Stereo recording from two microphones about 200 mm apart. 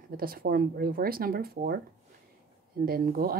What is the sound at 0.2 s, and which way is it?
Speech, 45° right (ahead or behind).